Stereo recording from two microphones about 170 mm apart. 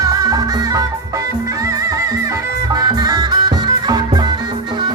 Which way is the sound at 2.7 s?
25° right (ahead or behind).